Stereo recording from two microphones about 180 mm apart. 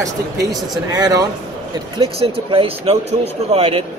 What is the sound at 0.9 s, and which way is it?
Speech, 20° right (ahead or behind).